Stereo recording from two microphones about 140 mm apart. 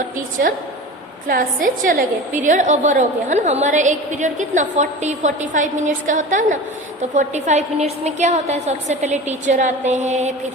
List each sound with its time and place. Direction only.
1.3 s a woman's voice: 75° right (ahead or behind); by 10.3 s 60° right (ahead or behind)